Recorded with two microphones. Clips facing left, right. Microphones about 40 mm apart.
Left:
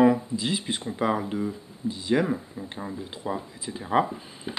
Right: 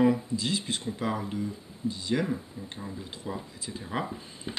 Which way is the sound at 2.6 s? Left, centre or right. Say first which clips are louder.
Left 4 dB; left.